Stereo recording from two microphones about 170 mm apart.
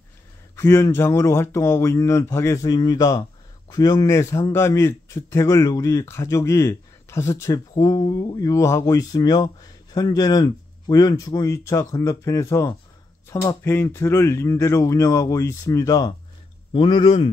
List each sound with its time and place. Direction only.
0.6 s a man's voice: 15° left (ahead or behind); by 17.3 s 30° left (ahead or behind)